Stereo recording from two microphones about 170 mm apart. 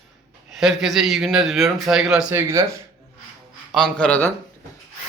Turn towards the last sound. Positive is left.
turn(degrees=10)  # may be behind; listen again after turning